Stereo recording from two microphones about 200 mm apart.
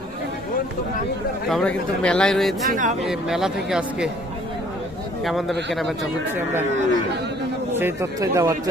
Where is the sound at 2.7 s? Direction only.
40° right (ahead or behind).